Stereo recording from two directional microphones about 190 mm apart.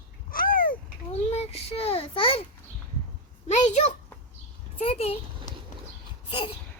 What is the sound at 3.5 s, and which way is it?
A child's voice, 35° left (ahead or behind).